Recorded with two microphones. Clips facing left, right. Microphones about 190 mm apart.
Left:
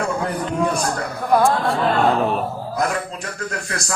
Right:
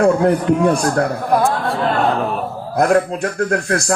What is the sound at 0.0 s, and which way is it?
Speech, 55° right (ahead or behind).